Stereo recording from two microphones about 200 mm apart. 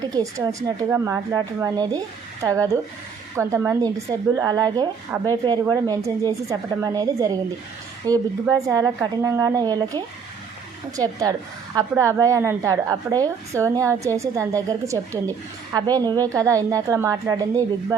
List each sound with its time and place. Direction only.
0.0 s a woman's voice: 20° right (ahead or behind)